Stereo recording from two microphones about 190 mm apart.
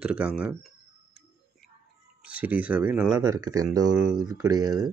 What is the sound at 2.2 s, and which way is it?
Speech, 10° right (ahead or behind).